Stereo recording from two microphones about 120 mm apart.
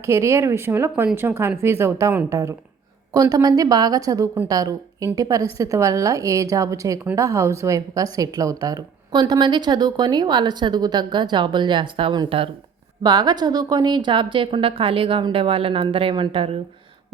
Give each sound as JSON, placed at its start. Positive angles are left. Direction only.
{"t": 0.0, "sound": "a woman's voice", "side_deg": -25}